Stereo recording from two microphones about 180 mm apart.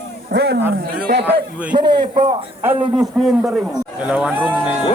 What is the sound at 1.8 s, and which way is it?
Speech, 25° right (ahead or behind).